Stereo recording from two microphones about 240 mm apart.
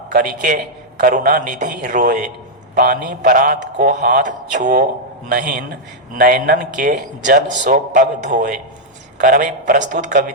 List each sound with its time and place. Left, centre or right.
0.1 s a man's voice: right